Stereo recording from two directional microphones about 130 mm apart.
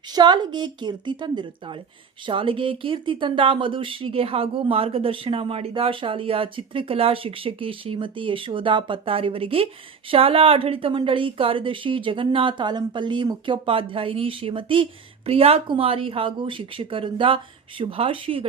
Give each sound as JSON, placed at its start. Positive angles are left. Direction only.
{"t": 0.1, "sound": "speech", "side_deg": -35}